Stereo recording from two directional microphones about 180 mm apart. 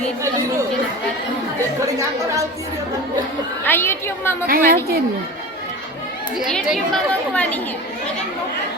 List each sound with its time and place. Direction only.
2.0 s speech: 15° right (ahead or behind)
3.6 s a woman's voice: 10° left (ahead or behind)
4.4 s a woman's voice: 55° right (ahead or behind)
6.3 s speech: 5° right (ahead or behind)